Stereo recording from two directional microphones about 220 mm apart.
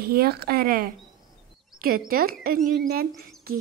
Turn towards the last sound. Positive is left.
turn(degrees=-45)  # may be behind; listen again after turning